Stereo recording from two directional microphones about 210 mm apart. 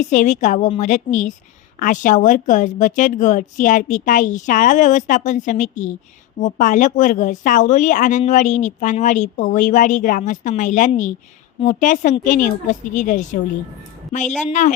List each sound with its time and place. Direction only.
0.1 s speech: 35° left (ahead or behind)